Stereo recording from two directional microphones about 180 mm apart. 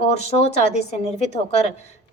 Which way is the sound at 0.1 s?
35° left (ahead or behind).